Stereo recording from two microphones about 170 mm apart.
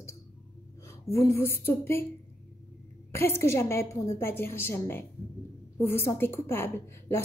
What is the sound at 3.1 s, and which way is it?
A woman's voice, 15° left (ahead or behind).